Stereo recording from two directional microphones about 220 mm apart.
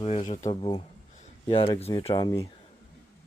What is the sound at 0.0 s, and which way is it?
Speech, 30° left (ahead or behind).